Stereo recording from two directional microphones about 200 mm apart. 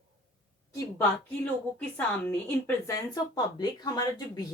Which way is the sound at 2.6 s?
15° left (ahead or behind).